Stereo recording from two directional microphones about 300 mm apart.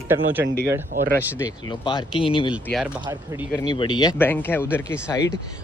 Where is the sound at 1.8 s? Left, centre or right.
Centre.